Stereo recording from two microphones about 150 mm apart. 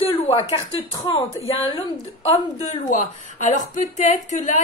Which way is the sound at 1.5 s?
40° left (ahead or behind).